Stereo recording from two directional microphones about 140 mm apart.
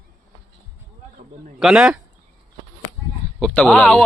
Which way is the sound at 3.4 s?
5° left (ahead or behind).